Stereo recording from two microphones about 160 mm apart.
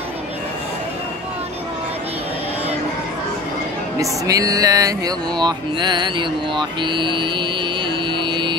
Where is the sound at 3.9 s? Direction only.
20° right (ahead or behind).